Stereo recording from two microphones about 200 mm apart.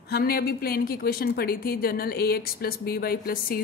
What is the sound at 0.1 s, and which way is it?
A woman's voice, 50° left (ahead or behind).